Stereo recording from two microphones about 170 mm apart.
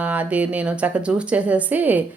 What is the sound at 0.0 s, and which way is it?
A woman's voice, 10° right (ahead or behind).